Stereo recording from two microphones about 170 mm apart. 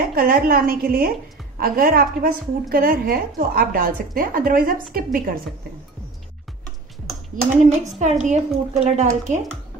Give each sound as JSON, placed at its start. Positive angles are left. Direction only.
{"t": 0.1, "sound": "a woman's voice", "side_deg": -60}
{"t": 8.0, "sound": "a woman's voice", "side_deg": -45}